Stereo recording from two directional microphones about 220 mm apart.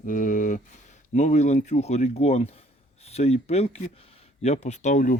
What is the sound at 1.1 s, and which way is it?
Speech, 35° left (ahead or behind).